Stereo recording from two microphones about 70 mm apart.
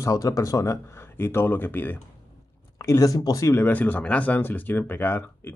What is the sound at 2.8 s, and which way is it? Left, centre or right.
Speech, left.